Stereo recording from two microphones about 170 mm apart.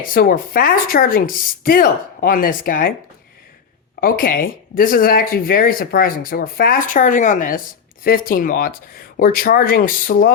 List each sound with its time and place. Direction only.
0.0 s speech: 55° left (ahead or behind)
4.0 s speech: 55° left (ahead or behind)